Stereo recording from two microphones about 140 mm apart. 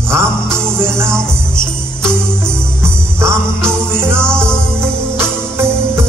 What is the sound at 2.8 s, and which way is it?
Music, 20° right (ahead or behind).